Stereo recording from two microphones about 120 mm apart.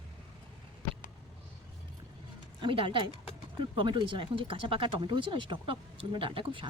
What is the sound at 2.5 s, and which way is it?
Speech, 45° right (ahead or behind).